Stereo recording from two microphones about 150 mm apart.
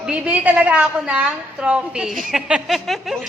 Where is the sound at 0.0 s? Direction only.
10° right (ahead or behind).